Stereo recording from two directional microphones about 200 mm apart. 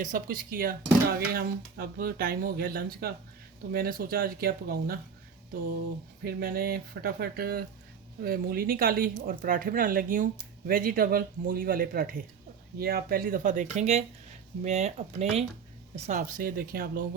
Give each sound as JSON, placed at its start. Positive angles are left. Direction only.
{"t": 0.0, "sound": "speech", "side_deg": -45}
{"t": 6.2, "sound": "speech", "side_deg": -50}